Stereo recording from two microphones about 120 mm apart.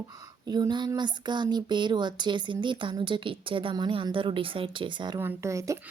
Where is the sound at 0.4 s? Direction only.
35° right (ahead or behind).